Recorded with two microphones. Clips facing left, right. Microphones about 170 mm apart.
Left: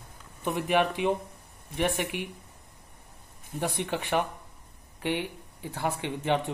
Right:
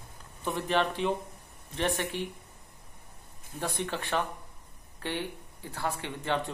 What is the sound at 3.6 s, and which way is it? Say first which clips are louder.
Speech: left 3 dB; 15° left (ahead or behind).